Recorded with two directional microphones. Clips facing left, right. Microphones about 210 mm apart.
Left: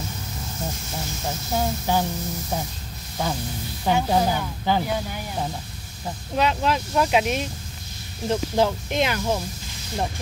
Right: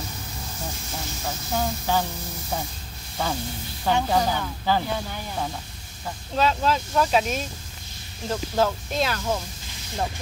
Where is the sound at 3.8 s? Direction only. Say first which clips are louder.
Left 1 dB; 10° left (ahead or behind).